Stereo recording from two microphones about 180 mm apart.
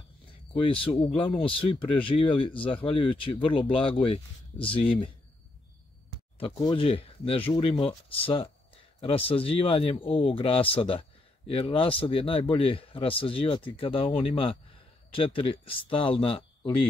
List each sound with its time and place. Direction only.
0.6 s speech: 30° left (ahead or behind)
6.4 s speech: 30° left (ahead or behind)